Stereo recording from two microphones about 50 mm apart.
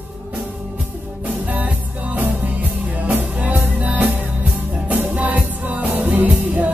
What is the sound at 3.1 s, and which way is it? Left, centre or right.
Music, right.